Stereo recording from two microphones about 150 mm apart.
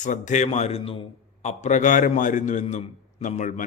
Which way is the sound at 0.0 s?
55° left (ahead or behind).